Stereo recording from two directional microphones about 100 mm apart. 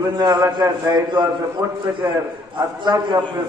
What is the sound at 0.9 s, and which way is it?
Mantra, 45° right (ahead or behind).